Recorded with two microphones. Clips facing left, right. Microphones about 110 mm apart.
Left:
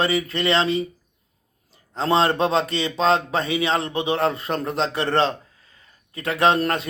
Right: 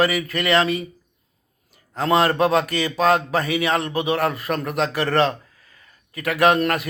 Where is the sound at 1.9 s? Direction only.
25° left (ahead or behind).